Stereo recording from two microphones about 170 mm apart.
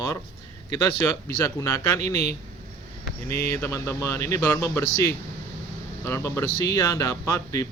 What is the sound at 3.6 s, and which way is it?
Speech, 15° left (ahead or behind).